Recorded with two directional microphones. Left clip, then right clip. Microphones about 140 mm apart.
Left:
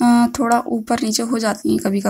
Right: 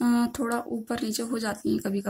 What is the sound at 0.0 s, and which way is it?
Speech, 30° left (ahead or behind).